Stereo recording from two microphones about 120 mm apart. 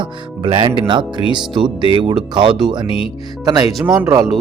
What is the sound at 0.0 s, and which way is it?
Speech, 45° right (ahead or behind).